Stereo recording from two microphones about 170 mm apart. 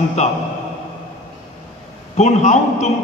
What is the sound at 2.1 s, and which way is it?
Speech, 40° left (ahead or behind).